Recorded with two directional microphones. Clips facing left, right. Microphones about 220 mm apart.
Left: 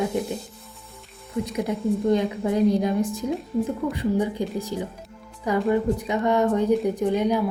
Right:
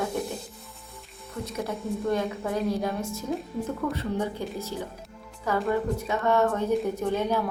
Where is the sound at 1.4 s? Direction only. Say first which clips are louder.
Left 6 dB; 15° left (ahead or behind).